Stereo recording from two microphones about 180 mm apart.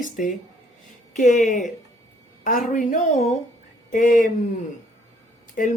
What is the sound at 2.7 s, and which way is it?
A woman's voice, 45° left (ahead or behind).